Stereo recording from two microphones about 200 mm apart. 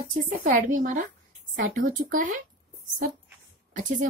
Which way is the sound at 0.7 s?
40° right (ahead or behind).